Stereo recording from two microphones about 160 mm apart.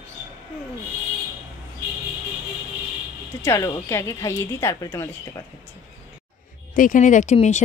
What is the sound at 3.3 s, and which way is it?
Speech, 15° left (ahead or behind).